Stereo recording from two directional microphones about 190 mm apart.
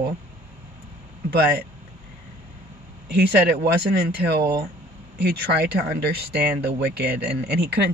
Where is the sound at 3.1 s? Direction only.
60° right (ahead or behind).